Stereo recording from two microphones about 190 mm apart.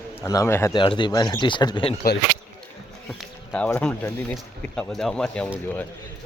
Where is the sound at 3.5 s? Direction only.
5° left (ahead or behind).